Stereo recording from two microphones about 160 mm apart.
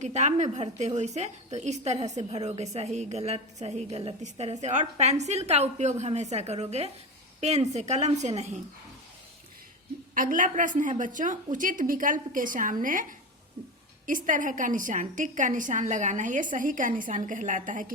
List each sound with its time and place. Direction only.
0.0 s a woman's voice: 45° right (ahead or behind)
10.2 s a woman's voice: 55° right (ahead or behind)